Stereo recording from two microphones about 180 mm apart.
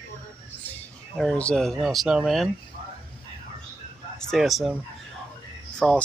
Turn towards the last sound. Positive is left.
turn(degrees=0)  # may be behind; listen again after turning